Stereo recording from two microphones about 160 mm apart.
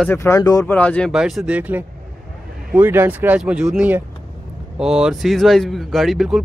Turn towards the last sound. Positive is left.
turn(degrees=0)  # may be behind; listen again after turning